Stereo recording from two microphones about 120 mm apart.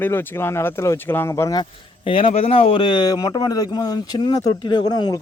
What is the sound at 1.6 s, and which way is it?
Speech, 50° left (ahead or behind).